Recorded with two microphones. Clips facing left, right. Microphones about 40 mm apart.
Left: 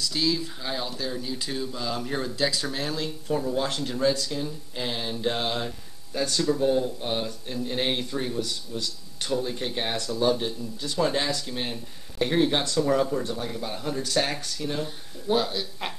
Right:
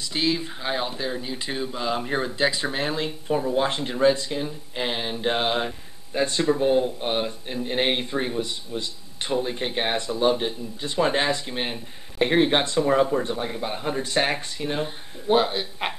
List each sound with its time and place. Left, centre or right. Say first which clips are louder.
0.0 s speech: right 1 dB; right